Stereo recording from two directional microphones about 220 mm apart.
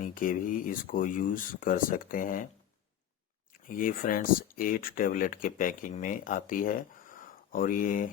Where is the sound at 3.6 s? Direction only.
40° left (ahead or behind).